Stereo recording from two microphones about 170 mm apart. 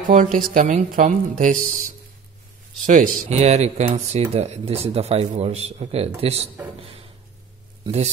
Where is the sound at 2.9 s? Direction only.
45° right (ahead or behind).